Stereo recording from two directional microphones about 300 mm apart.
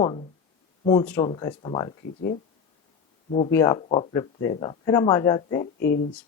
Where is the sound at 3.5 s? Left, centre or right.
Centre.